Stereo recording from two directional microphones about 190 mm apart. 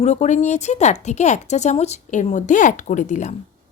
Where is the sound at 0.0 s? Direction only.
35° left (ahead or behind).